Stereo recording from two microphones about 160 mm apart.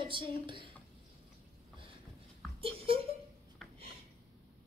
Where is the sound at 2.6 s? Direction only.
35° right (ahead or behind).